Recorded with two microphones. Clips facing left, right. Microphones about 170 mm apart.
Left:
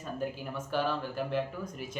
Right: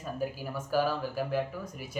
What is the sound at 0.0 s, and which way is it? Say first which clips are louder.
Speech: right 1 dB; 5° right (ahead or behind).